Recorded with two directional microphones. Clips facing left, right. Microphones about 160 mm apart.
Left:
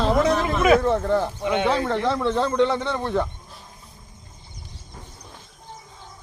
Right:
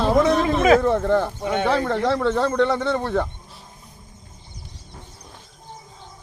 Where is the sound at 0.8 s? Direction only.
75° right (ahead or behind).